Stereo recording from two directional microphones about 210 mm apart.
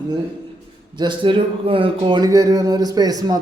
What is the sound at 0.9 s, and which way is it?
A man's voice, 20° right (ahead or behind).